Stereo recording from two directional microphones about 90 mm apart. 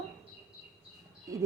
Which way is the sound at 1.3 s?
35° right (ahead or behind).